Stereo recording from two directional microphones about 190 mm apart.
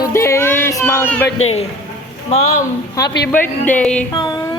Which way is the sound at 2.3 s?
35° left (ahead or behind).